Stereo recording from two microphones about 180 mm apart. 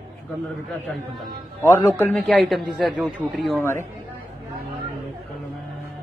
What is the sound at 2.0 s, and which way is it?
A man's voice, 5° left (ahead or behind).